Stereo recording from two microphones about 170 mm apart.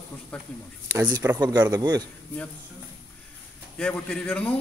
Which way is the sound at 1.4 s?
25° right (ahead or behind).